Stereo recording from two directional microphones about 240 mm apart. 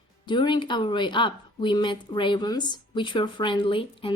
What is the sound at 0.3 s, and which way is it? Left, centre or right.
A woman's voice, centre.